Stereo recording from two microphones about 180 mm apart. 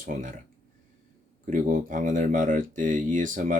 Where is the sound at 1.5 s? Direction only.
45° right (ahead or behind).